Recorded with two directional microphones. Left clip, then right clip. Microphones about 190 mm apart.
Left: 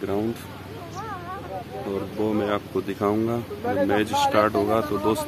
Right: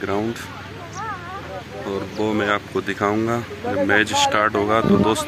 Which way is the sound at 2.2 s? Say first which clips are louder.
Right 4 dB; centre (ahead or behind).